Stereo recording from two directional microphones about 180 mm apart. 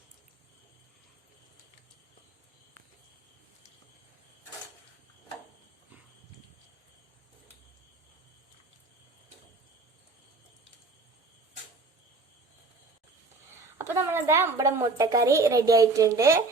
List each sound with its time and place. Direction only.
13.7 s a woman's voice: 15° right (ahead or behind)